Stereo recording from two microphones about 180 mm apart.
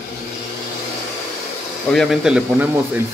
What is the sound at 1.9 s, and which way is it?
Speech, centre (ahead or behind).